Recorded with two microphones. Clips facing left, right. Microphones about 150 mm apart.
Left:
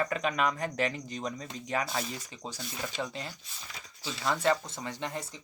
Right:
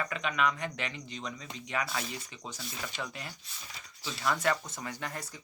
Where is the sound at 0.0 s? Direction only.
40° left (ahead or behind).